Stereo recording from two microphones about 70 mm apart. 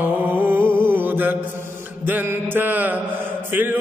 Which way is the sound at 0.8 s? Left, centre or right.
Right.